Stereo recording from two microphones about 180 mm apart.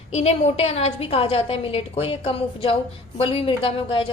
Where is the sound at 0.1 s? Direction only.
35° left (ahead or behind).